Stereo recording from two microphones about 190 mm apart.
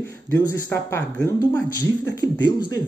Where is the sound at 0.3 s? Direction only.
15° left (ahead or behind).